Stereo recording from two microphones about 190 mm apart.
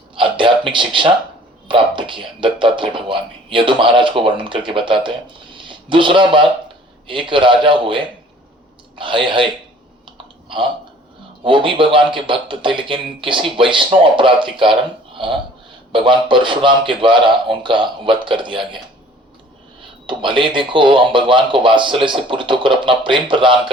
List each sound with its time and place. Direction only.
0.2 s a sound: 25° right (ahead or behind)
1.6 s speech: 25° right (ahead or behind)
10.1 s clicking: 25° right (ahead or behind)
11.4 s speech: 25° right (ahead or behind)
20.1 s speech: 25° right (ahead or behind)